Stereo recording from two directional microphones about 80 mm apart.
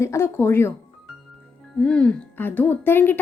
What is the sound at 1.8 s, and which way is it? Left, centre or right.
Speech, centre.